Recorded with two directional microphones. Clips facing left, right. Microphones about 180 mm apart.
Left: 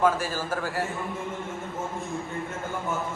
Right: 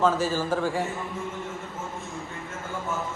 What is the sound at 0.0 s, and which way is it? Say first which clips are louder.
Speech: right 1 dB; 10° left (ahead or behind).